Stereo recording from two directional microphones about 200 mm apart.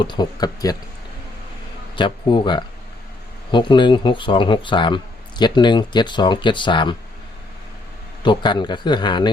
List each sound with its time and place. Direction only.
0.0 s speech: 20° left (ahead or behind)
2.0 s speech: 25° left (ahead or behind)
8.2 s speech: 25° left (ahead or behind)